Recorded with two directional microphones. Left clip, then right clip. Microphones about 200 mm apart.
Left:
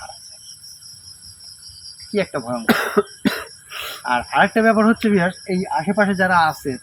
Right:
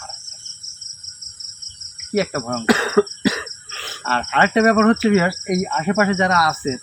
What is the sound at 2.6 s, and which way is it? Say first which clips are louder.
Cough: right 1 dB; 15° left (ahead or behind).